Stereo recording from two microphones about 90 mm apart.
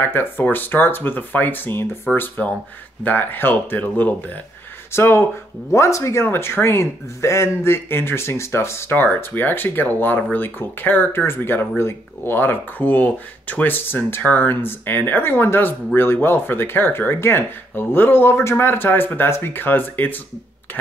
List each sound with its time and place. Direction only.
0.0 s speech: 25° left (ahead or behind)